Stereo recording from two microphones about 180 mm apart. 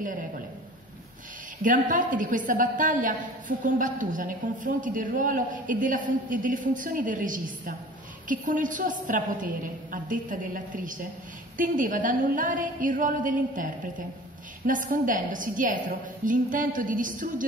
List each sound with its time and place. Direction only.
1.6 s a woman's voice: 45° right (ahead or behind)